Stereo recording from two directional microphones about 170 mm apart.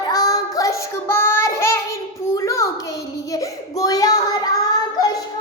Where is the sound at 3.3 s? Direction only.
20° left (ahead or behind).